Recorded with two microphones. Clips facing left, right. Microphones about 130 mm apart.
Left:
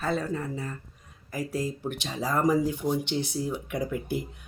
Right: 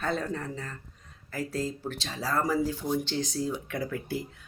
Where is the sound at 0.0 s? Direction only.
5° left (ahead or behind).